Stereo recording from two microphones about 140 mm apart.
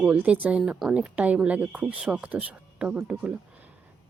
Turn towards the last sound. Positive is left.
turn(degrees=-10)  # may be behind; listen again after turning